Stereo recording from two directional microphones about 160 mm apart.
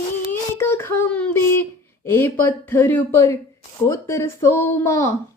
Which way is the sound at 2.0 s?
15° left (ahead or behind).